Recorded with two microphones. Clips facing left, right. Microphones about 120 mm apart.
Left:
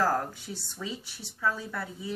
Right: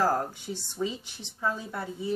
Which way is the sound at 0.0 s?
25° right (ahead or behind).